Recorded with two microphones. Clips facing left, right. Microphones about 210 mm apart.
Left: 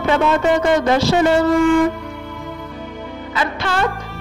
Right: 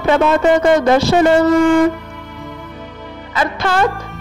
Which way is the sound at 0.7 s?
50° right (ahead or behind).